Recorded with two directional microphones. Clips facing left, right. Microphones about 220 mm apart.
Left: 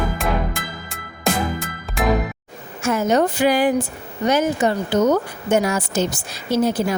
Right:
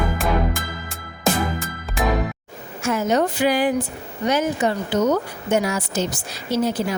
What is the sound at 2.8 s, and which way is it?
Speech, 45° left (ahead or behind).